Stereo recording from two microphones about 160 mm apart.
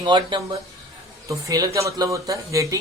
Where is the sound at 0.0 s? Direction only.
30° right (ahead or behind).